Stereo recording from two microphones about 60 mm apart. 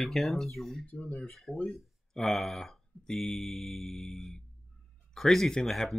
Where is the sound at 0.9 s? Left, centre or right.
Left.